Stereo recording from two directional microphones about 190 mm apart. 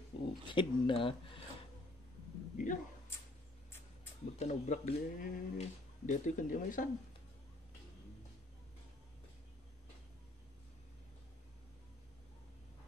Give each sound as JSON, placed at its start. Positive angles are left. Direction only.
{"t": 0.1, "sound": "a sound", "side_deg": 25}
{"t": 0.5, "sound": "speech", "side_deg": 25}
{"t": 2.5, "sound": "speech", "side_deg": 45}
{"t": 4.4, "sound": "speech", "side_deg": 35}